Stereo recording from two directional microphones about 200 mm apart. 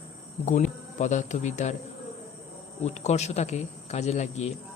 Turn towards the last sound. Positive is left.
turn(degrees=35)  # may be behind; listen again after turning